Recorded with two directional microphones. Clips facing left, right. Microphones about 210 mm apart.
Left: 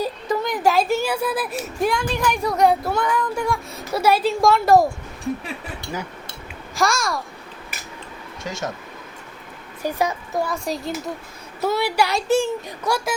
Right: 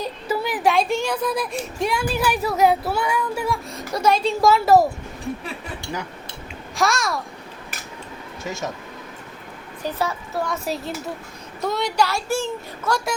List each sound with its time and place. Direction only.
0.3 s speech: 5° right (ahead or behind)
6.7 s speech: centre (ahead or behind)
8.4 s speech: centre (ahead or behind)
9.8 s a child's voice: 15° left (ahead or behind)
10.5 s a child's voice: centre (ahead or behind); by 13.0 s 15° left (ahead or behind)